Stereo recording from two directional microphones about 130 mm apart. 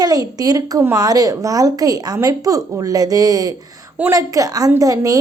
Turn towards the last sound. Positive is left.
turn(degrees=-25)  # may be behind; listen again after turning